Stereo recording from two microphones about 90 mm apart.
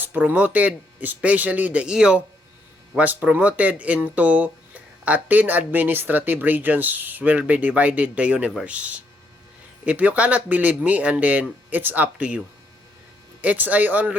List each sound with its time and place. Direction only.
0.0 s speech: 20° right (ahead or behind)
13.4 s speech: 15° right (ahead or behind)